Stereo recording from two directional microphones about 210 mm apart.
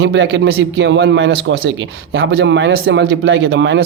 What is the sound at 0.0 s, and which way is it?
A man's voice, 55° right (ahead or behind).